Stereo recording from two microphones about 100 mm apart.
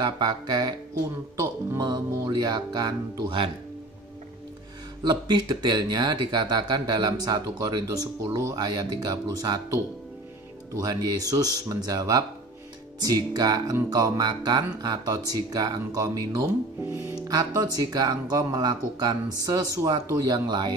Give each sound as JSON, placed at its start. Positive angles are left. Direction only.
{"t": 0.0, "sound": "speech", "side_deg": -45}
{"t": 1.8, "sound": "speech", "side_deg": -45}
{"t": 5.0, "sound": "speech", "side_deg": -45}